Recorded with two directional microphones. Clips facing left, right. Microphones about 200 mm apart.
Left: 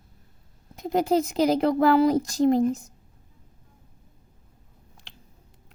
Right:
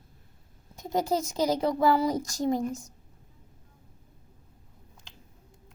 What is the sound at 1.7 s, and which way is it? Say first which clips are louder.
Speech: left 5 dB; 60° left (ahead or behind).